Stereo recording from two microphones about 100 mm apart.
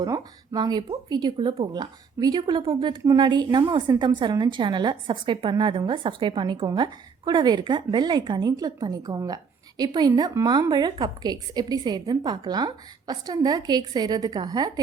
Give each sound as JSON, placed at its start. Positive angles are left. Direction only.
{"t": 0.0, "sound": "a woman's voice", "side_deg": -40}